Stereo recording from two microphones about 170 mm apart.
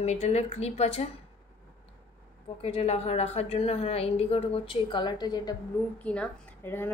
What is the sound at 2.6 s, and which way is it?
A woman's voice, 35° left (ahead or behind).